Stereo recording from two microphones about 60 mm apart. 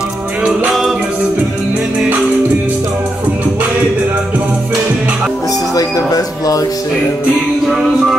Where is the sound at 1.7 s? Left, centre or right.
Centre.